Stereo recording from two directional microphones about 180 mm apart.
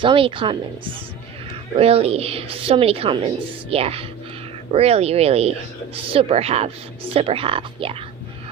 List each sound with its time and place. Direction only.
0.0 s a woman's voice: 30° right (ahead or behind)